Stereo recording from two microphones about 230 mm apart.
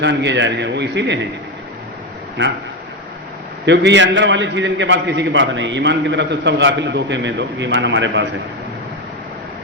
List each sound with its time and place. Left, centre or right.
0.0 s a man's voice: right
3.7 s a man's voice: right